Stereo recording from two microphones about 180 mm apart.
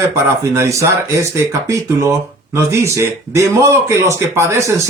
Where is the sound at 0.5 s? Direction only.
15° right (ahead or behind).